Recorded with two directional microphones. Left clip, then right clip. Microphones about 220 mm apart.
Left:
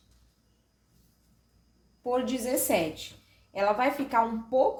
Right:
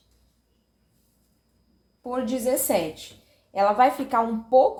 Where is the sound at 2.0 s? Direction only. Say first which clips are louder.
Right 3 dB; 20° right (ahead or behind).